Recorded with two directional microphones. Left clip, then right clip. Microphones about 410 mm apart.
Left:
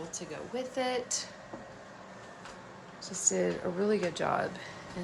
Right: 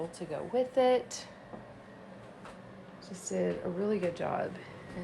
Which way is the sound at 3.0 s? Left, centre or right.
Centre.